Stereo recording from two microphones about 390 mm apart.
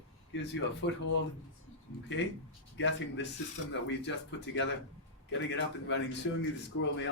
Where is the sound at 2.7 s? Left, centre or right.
Left.